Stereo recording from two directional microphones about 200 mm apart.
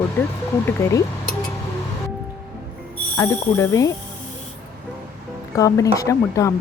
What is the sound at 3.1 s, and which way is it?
Speech, 10° left (ahead or behind).